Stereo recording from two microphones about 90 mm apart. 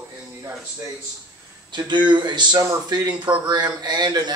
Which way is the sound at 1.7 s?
60° right (ahead or behind).